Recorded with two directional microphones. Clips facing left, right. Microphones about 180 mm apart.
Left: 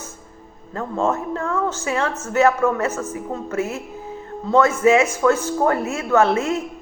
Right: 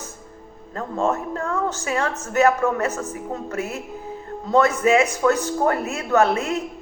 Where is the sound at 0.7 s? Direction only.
35° right (ahead or behind).